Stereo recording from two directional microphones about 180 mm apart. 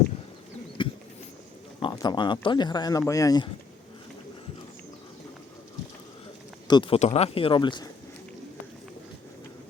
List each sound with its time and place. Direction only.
0.8 s a sound: 25° left (ahead or behind)
1.8 s speech: 20° left (ahead or behind)
6.7 s speech: 25° left (ahead or behind)